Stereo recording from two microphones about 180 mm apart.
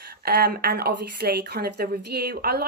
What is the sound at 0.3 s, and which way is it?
Speech, 60° right (ahead or behind).